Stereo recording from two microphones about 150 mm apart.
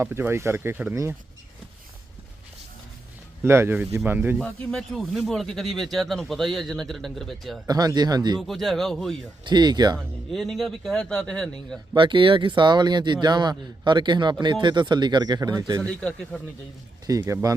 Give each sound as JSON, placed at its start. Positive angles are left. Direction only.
{"t": 0.0, "sound": "speech", "side_deg": -15}
{"t": 3.4, "sound": "speech", "side_deg": -15}
{"t": 4.4, "sound": "speech", "side_deg": 5}
{"t": 7.7, "sound": "a man's voice", "side_deg": -25}
{"t": 8.4, "sound": "speech", "side_deg": 0}
{"t": 9.4, "sound": "a man's voice", "side_deg": -30}
{"t": 10.3, "sound": "speech", "side_deg": 0}
{"t": 11.9, "sound": "a man's voice", "side_deg": -35}
{"t": 15.8, "sound": "speech", "side_deg": 5}
{"t": 17.1, "sound": "a man's voice", "side_deg": -20}